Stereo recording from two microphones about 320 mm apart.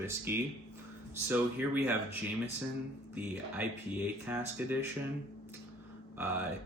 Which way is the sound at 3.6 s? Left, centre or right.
Centre.